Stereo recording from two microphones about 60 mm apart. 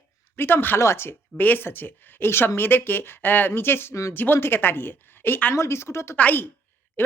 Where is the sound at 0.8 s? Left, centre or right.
Left.